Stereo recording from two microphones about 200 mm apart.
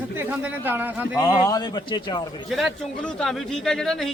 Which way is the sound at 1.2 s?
20° left (ahead or behind).